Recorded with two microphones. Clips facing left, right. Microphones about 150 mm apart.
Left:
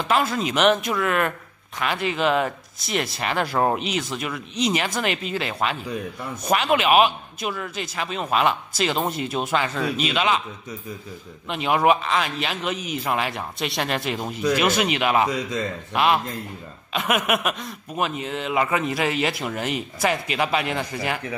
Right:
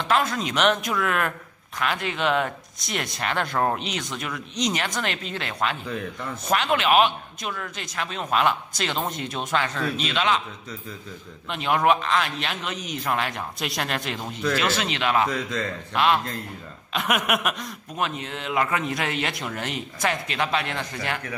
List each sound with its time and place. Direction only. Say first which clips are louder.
0.1 s speech: left 1 dB; 5° left (ahead or behind)
11.4 s speech: left 2 dB; 5° left (ahead or behind)
14.4 s a man's voice: left 4 dB; 15° left (ahead or behind)